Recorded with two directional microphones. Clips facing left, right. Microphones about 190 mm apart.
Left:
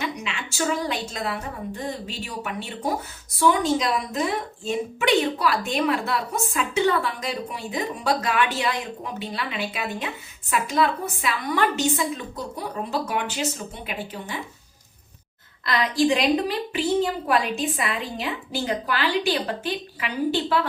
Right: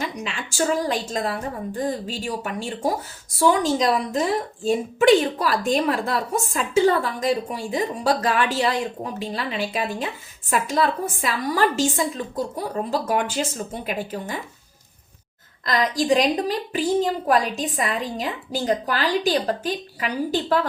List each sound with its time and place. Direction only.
0.0 s a woman's voice: 40° right (ahead or behind)
3.8 s a woman's voice: 40° right (ahead or behind)
15.6 s a woman's voice: 40° right (ahead or behind)